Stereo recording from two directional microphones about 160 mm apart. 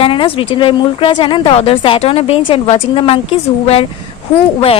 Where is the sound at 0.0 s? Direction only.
35° left (ahead or behind).